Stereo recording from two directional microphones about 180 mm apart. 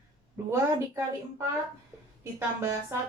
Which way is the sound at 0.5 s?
15° right (ahead or behind).